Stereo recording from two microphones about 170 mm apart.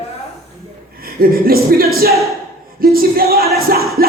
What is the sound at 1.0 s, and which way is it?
Speech, 60° right (ahead or behind).